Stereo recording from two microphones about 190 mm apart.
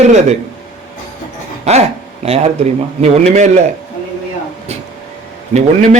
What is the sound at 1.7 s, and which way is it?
Speech, 35° right (ahead or behind).